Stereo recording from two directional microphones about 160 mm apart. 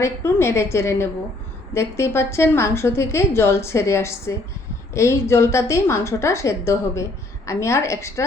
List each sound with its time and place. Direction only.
0.0 s a woman's voice: 15° left (ahead or behind)